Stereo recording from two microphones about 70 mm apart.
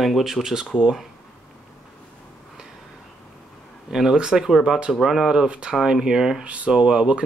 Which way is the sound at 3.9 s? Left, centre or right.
Centre.